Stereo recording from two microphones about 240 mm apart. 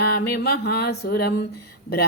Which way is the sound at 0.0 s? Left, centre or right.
Left.